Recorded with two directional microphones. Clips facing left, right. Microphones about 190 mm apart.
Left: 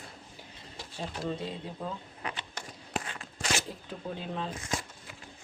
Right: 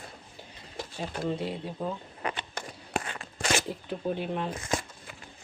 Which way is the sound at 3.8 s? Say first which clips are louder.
Right 7 dB; 15° right (ahead or behind).